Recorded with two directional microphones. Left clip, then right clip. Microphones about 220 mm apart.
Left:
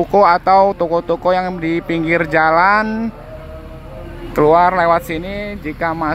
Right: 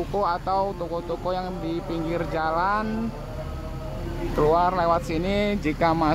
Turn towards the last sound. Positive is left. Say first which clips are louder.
# left 3 dB
turn(degrees=5)  # may be behind; listen again after turning